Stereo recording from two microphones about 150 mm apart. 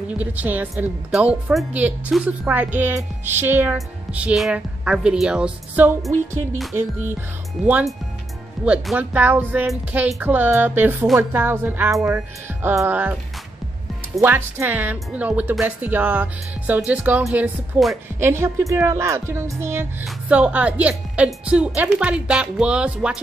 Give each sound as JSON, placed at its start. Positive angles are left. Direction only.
{"t": 0.2, "sound": "a woman's voice", "side_deg": -10}
{"t": 7.6, "sound": "music", "side_deg": 0}
{"t": 8.6, "sound": "a woman's voice", "side_deg": -10}
{"t": 9.7, "sound": "music", "side_deg": 0}
{"t": 10.2, "sound": "a woman's voice", "side_deg": -10}
{"t": 14.2, "sound": "a woman's voice", "side_deg": -15}